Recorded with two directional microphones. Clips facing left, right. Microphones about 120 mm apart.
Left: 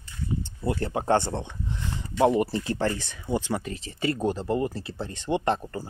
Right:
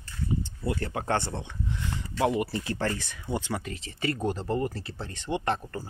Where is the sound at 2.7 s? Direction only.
15° left (ahead or behind).